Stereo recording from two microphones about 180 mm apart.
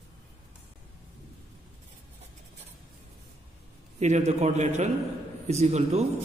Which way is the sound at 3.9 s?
40° right (ahead or behind).